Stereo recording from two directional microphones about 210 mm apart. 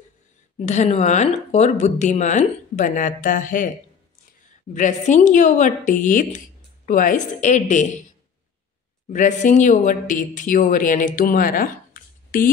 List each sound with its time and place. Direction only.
0.6 s speech: 35° left (ahead or behind)
9.1 s speech: 35° left (ahead or behind)